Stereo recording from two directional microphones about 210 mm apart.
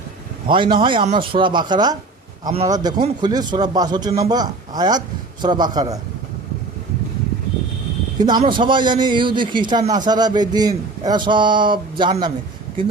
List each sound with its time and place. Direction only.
0.4 s a man's voice: 25° right (ahead or behind)
8.2 s a man's voice: 20° right (ahead or behind)